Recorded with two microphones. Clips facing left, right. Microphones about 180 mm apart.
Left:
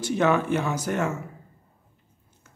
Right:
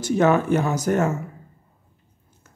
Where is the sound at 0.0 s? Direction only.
40° right (ahead or behind).